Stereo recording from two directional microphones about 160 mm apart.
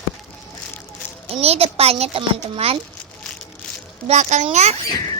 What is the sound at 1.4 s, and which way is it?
A child's voice, 40° right (ahead or behind).